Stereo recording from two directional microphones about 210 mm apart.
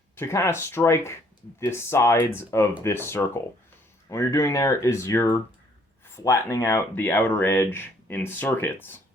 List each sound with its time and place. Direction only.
0.2 s speech: 10° left (ahead or behind)